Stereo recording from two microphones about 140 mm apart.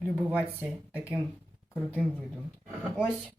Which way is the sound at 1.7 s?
10° right (ahead or behind).